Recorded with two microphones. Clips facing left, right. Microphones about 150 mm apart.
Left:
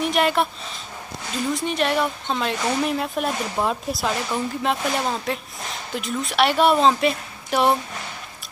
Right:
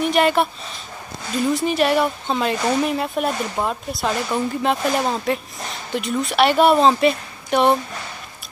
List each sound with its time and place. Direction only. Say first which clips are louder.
0.0 s speech: right 3 dB; centre (ahead or behind)
1.5 s speech: right 4 dB; 5° right (ahead or behind)